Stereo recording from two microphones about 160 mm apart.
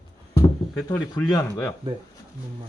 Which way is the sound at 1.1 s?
25° left (ahead or behind).